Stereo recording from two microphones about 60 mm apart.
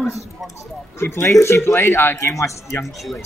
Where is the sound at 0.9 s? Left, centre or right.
Left.